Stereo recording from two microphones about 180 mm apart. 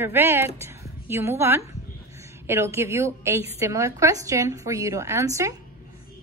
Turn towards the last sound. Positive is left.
turn(degrees=-15)  # may be behind; listen again after turning